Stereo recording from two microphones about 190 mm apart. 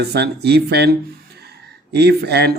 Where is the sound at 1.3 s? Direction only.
60° right (ahead or behind).